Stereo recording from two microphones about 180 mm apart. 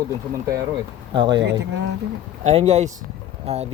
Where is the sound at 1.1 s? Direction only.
25° right (ahead or behind).